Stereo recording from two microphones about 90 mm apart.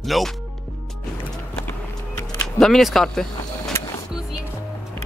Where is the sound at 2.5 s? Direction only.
5° left (ahead or behind).